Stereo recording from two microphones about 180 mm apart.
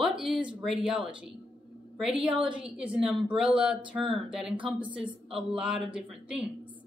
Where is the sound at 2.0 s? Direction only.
Centre (ahead or behind).